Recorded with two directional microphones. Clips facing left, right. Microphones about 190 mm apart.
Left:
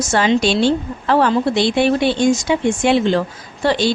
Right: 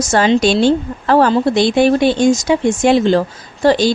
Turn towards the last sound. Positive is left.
turn(degrees=-40)  # may be behind; listen again after turning